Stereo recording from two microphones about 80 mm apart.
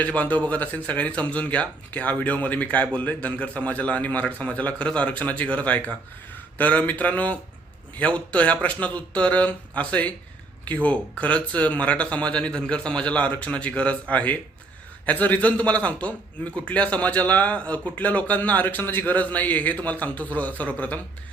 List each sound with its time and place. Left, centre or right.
0.0 s a man's voice: centre